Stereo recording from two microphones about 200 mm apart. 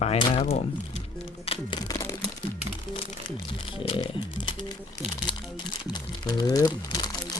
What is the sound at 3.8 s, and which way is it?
Music, 25° left (ahead or behind).